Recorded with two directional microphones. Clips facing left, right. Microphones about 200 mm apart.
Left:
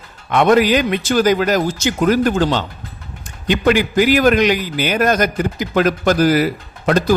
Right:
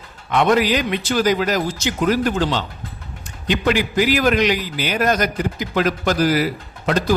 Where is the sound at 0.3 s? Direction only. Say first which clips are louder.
Left 4 dB; 50° left (ahead or behind).